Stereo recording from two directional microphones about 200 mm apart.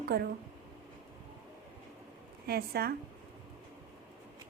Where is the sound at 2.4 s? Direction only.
50° right (ahead or behind).